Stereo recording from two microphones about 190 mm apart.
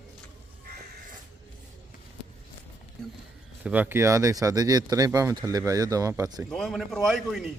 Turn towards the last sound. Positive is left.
turn(degrees=0)  # may be behind; listen again after turning